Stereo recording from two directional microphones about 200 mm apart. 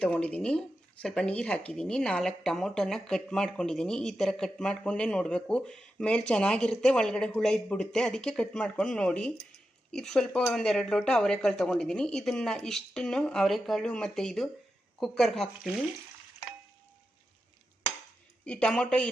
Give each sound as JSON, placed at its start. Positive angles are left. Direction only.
{"t": 0.0, "sound": "speech", "side_deg": 5}
{"t": 18.4, "sound": "speech", "side_deg": 5}